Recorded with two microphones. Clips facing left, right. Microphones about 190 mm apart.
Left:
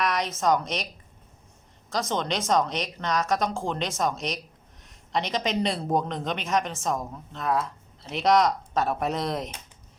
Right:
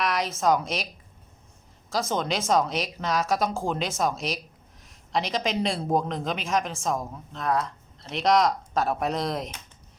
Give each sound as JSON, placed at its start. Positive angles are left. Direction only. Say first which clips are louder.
{"t": 0.0, "sound": "a man's voice", "louder": "even", "side_deg": 0}
{"t": 1.9, "sound": "a man's voice", "louder": "right 1 dB", "side_deg": -5}